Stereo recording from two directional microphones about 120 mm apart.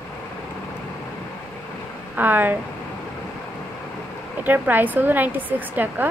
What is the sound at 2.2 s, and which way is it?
Speech, 15° right (ahead or behind).